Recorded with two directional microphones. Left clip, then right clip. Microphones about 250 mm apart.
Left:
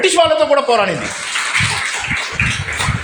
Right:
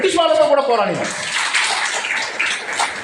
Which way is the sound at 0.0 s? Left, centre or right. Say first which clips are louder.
Left 2 dB; left.